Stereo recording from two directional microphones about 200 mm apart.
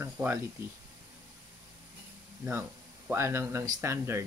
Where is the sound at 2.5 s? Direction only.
10° right (ahead or behind).